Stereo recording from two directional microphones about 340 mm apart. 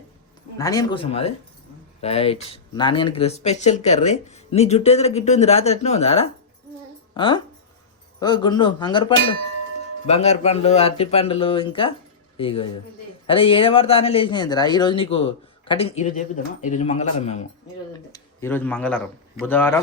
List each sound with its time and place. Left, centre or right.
0.6 s speech: centre
18.1 s speech: centre